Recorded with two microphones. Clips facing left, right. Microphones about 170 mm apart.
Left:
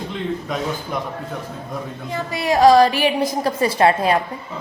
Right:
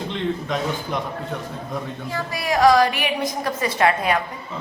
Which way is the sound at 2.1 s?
25° left (ahead or behind).